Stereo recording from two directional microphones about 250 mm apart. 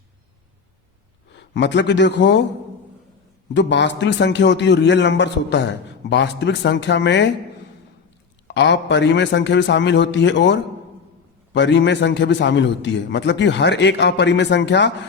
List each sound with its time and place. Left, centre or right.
1.3 s speech: left
3.5 s a man's voice: left
8.4 s a man's voice: left